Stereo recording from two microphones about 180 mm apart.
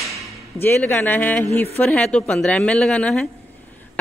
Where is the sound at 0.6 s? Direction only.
10° left (ahead or behind).